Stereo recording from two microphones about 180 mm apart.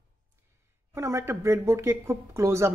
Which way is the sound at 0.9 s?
15° right (ahead or behind).